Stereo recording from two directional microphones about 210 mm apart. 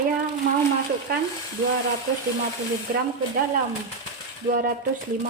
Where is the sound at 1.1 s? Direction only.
45° right (ahead or behind).